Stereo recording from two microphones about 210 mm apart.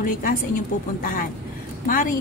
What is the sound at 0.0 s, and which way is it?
A woman's voice, 40° left (ahead or behind).